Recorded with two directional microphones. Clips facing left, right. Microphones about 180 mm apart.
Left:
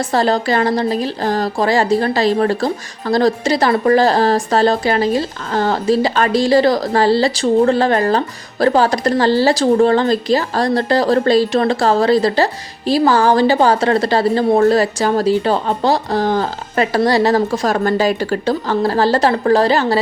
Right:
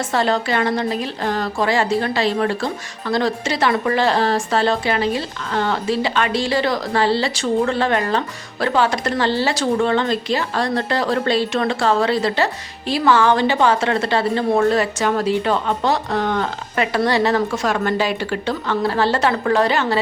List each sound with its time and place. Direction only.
0.1 s a woman's voice: 35° left (ahead or behind)